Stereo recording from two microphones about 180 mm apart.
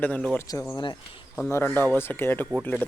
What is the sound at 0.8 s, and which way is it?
Speech, 25° left (ahead or behind).